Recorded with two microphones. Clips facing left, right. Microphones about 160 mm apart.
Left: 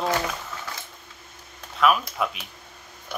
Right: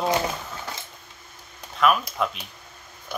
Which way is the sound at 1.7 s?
Centre (ahead or behind).